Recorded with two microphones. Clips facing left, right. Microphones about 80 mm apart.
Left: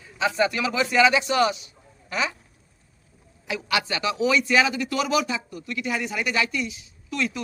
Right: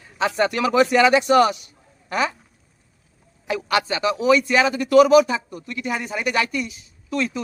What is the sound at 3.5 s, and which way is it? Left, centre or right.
A man's voice, right.